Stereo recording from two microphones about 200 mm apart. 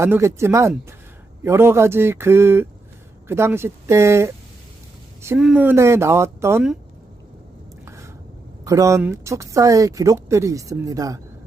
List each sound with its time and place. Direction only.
0.0 s speech: 15° right (ahead or behind)
5.4 s speech: 5° right (ahead or behind)
7.9 s squish: 15° right (ahead or behind)
8.6 s speech: 15° right (ahead or behind)